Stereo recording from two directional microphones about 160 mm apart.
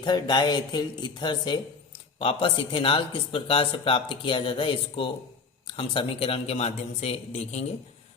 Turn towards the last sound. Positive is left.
turn(degrees=40)  # may be behind; listen again after turning